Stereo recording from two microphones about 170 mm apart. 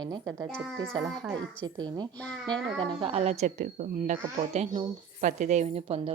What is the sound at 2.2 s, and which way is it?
Speech, 10° left (ahead or behind).